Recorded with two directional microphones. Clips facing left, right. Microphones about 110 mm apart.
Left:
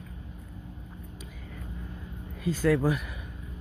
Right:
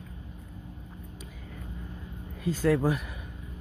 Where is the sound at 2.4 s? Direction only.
30° right (ahead or behind).